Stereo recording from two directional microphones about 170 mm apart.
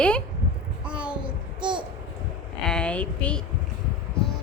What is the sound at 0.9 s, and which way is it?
Babbling, 5° right (ahead or behind).